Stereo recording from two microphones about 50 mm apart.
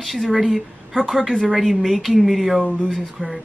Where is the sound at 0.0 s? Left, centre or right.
Centre.